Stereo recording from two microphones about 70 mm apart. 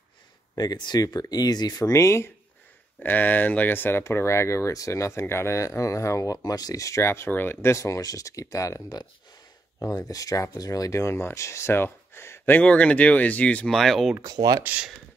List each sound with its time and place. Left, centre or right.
0.6 s speech: left
3.0 s speech: left
7.0 s speech: left
7.7 s speech: left
12.5 s speech: centre
13.7 s speech: centre
14.2 s speech: right